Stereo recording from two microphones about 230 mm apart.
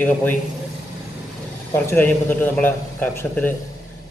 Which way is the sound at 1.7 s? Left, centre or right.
Centre.